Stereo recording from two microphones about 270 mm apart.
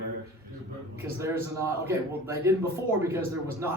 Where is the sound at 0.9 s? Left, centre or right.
Centre.